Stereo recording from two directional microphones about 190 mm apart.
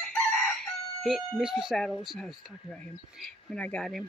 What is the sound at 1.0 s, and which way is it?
Speech, centre (ahead or behind).